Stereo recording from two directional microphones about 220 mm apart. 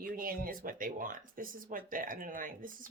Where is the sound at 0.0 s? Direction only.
40° right (ahead or behind).